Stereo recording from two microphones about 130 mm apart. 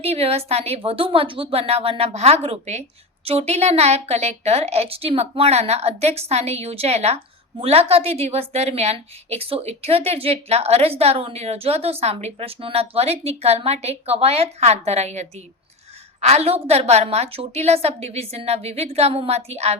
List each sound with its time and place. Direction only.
0.0 s a woman's voice: 50° right (ahead or behind)